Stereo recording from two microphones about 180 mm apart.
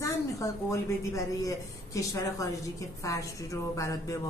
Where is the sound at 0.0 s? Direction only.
15° left (ahead or behind).